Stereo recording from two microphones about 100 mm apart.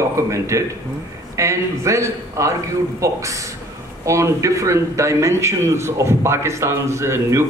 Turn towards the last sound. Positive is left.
turn(degrees=-30)  # may be behind; listen again after turning